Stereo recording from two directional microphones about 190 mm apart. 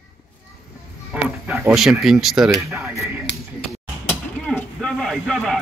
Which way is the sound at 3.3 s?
70° left (ahead or behind).